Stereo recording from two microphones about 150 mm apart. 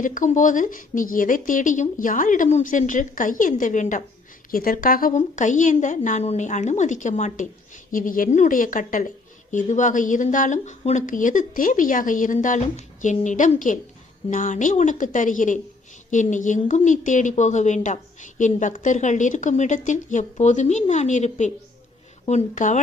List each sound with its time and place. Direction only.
0.0 s a woman's voice: 60° left (ahead or behind)
4.5 s a woman's voice: 70° left (ahead or behind); by 7.4 s 55° left (ahead or behind)
7.9 s a woman's voice: 65° left (ahead or behind)